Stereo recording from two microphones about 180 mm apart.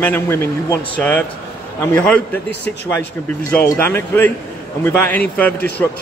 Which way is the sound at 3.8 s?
10° left (ahead or behind).